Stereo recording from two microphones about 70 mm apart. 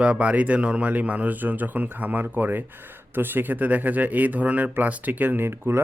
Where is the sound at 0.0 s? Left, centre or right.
Centre.